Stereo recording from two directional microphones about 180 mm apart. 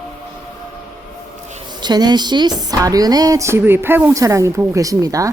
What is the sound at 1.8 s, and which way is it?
A woman's voice, 25° right (ahead or behind).